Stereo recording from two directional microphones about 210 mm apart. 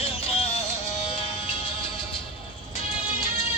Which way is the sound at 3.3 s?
30° left (ahead or behind).